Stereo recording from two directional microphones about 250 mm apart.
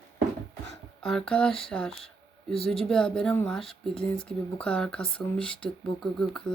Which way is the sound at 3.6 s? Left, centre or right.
Left.